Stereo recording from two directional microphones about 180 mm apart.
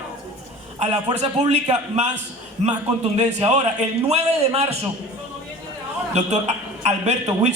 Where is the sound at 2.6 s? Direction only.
40° right (ahead or behind).